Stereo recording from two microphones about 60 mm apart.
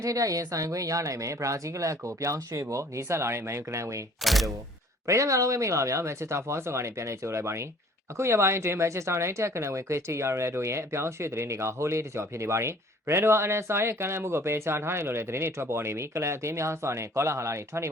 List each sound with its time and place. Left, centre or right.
0.0 s speech: right
4.2 s speech: centre
5.0 s speech: right